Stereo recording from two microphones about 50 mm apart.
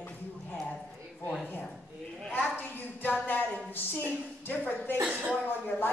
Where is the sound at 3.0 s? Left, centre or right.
Left.